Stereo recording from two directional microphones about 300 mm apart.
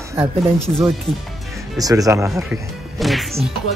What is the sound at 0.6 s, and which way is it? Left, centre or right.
Speech, centre.